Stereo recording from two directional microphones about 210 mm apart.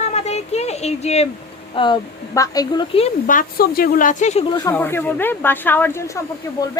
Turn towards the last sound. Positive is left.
turn(degrees=15)  # may be behind; listen again after turning